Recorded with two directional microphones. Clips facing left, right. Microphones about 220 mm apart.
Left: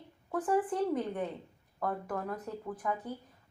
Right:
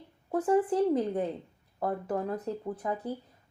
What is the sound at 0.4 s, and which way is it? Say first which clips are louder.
Speech: right 5 dB; 30° right (ahead or behind).